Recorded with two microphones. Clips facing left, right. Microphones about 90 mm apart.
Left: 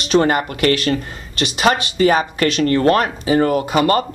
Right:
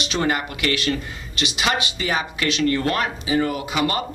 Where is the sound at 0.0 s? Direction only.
45° left (ahead or behind).